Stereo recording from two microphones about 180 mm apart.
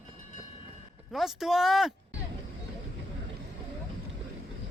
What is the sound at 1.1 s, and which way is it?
Speech, centre (ahead or behind).